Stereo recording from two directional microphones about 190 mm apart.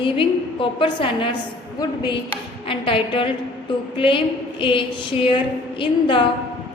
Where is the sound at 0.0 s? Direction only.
25° left (ahead or behind).